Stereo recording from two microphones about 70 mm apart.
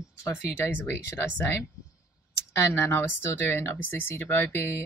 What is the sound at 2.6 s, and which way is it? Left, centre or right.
A woman's voice, left.